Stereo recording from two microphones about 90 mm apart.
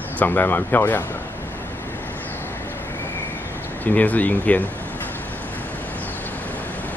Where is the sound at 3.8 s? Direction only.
20° left (ahead or behind).